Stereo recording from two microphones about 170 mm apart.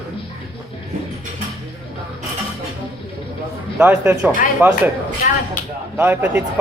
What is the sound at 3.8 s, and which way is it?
Speech, 10° right (ahead or behind).